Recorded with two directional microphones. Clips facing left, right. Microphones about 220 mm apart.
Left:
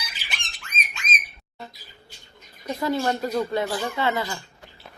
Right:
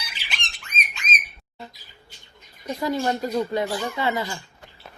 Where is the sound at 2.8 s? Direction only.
15° right (ahead or behind).